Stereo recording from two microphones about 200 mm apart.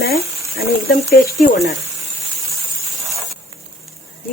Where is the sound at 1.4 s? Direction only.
55° left (ahead or behind).